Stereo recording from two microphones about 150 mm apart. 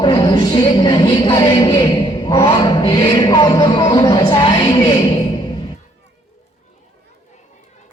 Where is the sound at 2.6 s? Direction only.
30° left (ahead or behind).